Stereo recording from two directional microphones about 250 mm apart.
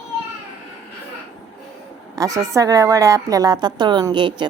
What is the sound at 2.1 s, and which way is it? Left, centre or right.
A woman's voice, centre.